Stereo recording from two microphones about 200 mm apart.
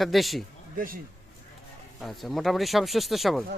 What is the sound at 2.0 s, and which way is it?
Speech, centre (ahead or behind).